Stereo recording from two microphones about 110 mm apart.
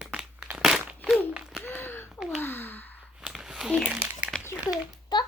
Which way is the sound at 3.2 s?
5° right (ahead or behind).